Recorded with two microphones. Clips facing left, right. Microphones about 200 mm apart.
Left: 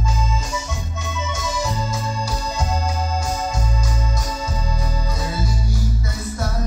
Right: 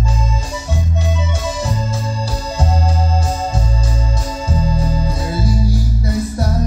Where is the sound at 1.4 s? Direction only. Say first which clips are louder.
Right 2 dB; 30° right (ahead or behind).